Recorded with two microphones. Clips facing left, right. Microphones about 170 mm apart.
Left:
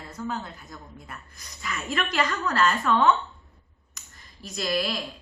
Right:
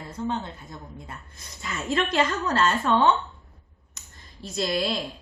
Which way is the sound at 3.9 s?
30° right (ahead or behind).